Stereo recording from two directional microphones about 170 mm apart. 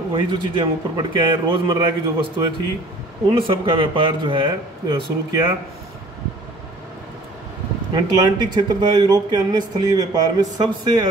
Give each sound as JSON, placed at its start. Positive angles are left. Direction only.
{"t": 0.1, "sound": "speech", "side_deg": -25}
{"t": 7.9, "sound": "speech", "side_deg": -25}